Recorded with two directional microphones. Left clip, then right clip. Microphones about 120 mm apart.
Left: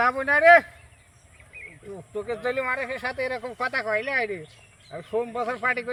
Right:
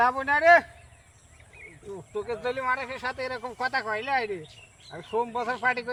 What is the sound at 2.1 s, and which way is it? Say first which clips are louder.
A man's voice: left 3 dB; 20° right (ahead or behind).